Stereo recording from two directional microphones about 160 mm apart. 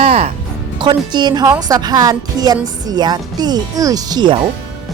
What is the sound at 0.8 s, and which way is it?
A woman's voice, 30° right (ahead or behind).